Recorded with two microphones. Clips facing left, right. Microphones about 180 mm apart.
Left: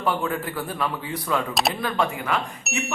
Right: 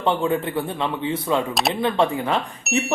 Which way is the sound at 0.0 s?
25° right (ahead or behind).